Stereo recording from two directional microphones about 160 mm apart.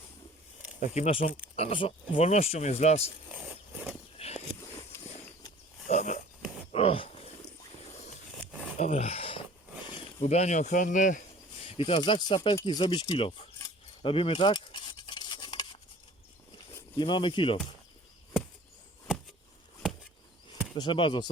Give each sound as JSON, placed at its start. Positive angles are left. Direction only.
{"t": 0.8, "sound": "speech", "side_deg": 45}
{"t": 5.9, "sound": "a sound", "side_deg": 50}
{"t": 8.8, "sound": "a sound", "side_deg": 40}
{"t": 10.2, "sound": "speech", "side_deg": 45}
{"t": 11.6, "sound": "speech", "side_deg": 35}
{"t": 12.6, "sound": "keys jangling", "side_deg": 30}
{"t": 17.0, "sound": "speech", "side_deg": 30}
{"t": 20.7, "sound": "speech", "side_deg": 30}